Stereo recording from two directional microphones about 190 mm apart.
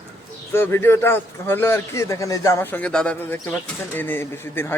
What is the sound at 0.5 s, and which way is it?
A man's voice, 10° left (ahead or behind).